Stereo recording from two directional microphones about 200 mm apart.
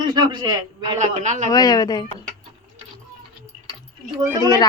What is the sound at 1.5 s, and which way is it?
Speech, 20° left (ahead or behind).